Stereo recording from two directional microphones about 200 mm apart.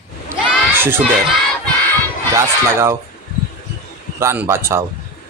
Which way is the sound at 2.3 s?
15° right (ahead or behind).